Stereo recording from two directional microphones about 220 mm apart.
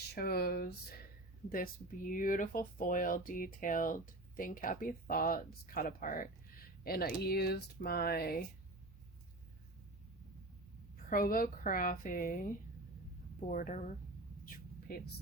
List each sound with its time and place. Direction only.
0.1 s speech: 45° left (ahead or behind)
11.1 s speech: 40° left (ahead or behind)
13.5 s speech: 35° left (ahead or behind)
14.4 s a sound: 40° left (ahead or behind)